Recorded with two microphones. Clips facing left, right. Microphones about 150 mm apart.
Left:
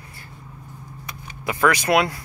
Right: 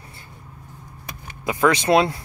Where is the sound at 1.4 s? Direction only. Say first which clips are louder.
Right 1 dB; 20° right (ahead or behind).